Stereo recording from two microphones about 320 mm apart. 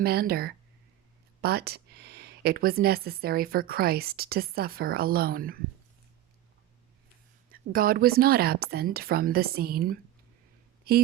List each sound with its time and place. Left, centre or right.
0.0 s speech: right
7.5 s speech: right